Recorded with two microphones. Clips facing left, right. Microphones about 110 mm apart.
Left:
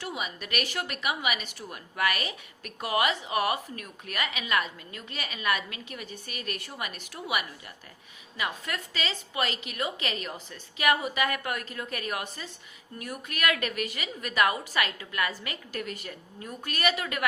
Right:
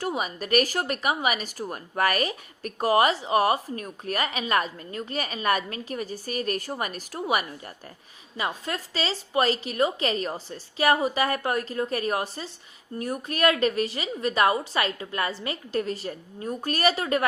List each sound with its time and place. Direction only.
0.0 s a woman's voice: 40° right (ahead or behind)
8.4 s a woman's voice: 30° right (ahead or behind)